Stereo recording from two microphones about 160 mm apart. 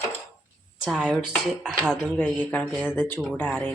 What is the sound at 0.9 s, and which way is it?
Speech, centre (ahead or behind).